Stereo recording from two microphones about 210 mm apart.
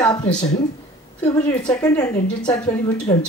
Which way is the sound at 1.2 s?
20° left (ahead or behind).